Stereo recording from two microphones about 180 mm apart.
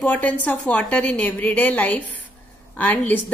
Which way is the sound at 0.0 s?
10° left (ahead or behind).